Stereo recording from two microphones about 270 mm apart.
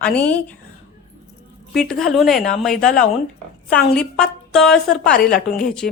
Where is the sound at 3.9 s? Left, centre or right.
Centre.